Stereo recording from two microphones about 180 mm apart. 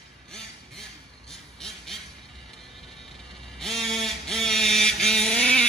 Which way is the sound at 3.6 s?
Centre (ahead or behind).